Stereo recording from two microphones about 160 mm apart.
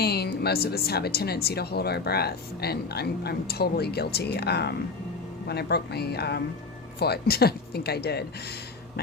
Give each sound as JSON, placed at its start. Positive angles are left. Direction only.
{"t": 0.0, "sound": "speech", "side_deg": 90}